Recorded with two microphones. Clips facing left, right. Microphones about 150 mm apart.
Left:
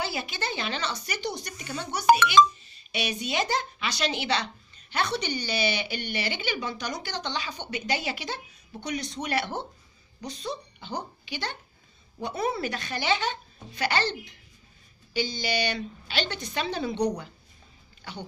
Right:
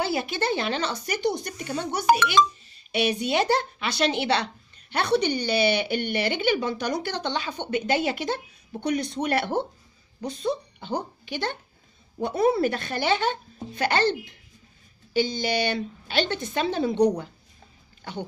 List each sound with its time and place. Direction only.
0.0 s speech: 55° right (ahead or behind)